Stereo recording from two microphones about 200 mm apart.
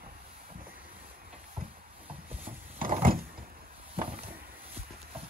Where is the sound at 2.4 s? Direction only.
45° right (ahead or behind).